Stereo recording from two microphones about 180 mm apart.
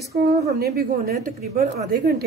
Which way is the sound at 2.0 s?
60° right (ahead or behind).